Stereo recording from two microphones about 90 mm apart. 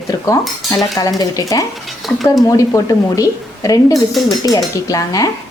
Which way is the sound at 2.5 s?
40° left (ahead or behind).